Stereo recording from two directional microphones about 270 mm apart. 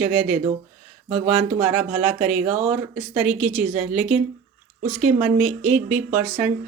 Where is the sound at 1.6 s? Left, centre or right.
Centre.